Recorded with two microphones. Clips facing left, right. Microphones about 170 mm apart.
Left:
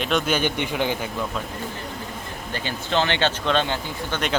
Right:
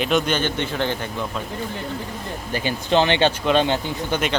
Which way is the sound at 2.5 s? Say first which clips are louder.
Right 5 dB; 15° right (ahead or behind).